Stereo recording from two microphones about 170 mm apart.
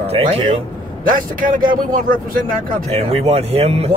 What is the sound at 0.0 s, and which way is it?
Speech, 35° right (ahead or behind).